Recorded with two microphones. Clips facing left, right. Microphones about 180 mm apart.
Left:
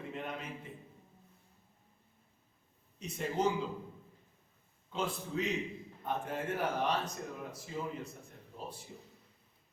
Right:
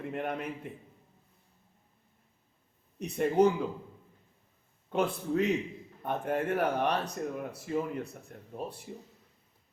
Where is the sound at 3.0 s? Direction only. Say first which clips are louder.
Right 10 dB; 60° right (ahead or behind).